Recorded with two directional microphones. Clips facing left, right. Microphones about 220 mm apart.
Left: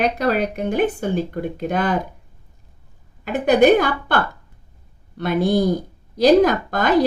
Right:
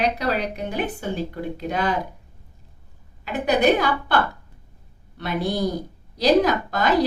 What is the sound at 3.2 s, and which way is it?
Speech, 50° left (ahead or behind).